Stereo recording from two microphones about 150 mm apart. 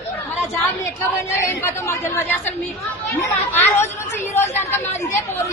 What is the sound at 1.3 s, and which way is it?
A woman's voice, 15° left (ahead or behind).